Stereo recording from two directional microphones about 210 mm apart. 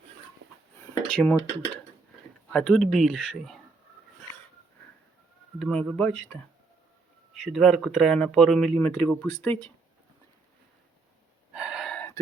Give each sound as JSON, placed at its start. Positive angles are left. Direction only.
{"t": 1.1, "sound": "speech", "side_deg": 5}
{"t": 5.5, "sound": "speech", "side_deg": 0}
{"t": 7.4, "sound": "speech", "side_deg": 0}
{"t": 11.5, "sound": "gasp", "side_deg": -5}